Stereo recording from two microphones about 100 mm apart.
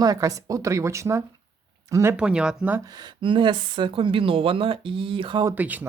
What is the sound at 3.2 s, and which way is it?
Speech, 60° right (ahead or behind).